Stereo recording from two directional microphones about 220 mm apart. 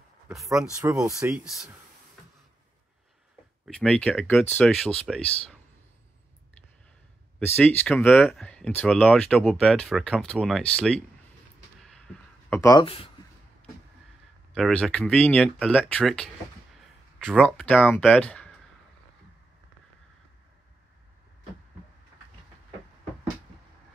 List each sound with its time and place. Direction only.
0.7 s speech: 15° right (ahead or behind)
1.2 s speech: 5° right (ahead or behind)
3.6 s speech: 5° left (ahead or behind)
7.3 s speech: 10° left (ahead or behind)
12.4 s speech: 15° left (ahead or behind)
14.5 s speech: 5° left (ahead or behind)